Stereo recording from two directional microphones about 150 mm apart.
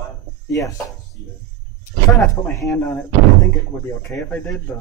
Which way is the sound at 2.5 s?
20° left (ahead or behind).